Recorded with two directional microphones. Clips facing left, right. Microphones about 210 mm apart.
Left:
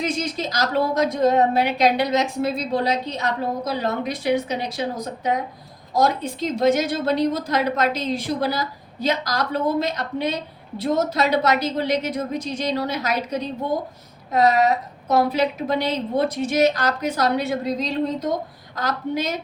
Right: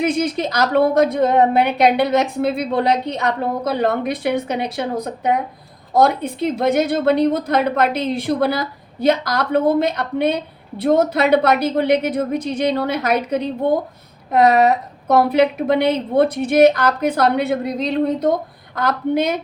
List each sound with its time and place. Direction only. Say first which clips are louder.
0.0 s a woman's voice: right 6 dB; 55° right (ahead or behind)